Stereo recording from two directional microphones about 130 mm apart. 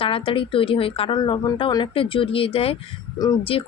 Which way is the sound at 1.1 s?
35° left (ahead or behind).